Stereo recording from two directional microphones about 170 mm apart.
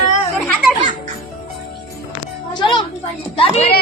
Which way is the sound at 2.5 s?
25° left (ahead or behind).